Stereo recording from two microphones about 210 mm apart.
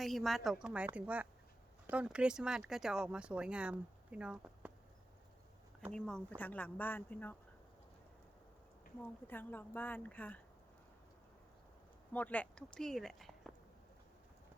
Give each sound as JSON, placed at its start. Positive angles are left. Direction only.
{"t": 0.0, "sound": "speech", "side_deg": 0}
{"t": 5.9, "sound": "speech", "side_deg": 5}
{"t": 9.0, "sound": "speech", "side_deg": 10}
{"t": 12.1, "sound": "speech", "side_deg": 5}